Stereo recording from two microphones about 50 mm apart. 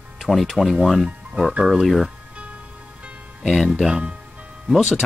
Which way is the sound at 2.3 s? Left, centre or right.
Right.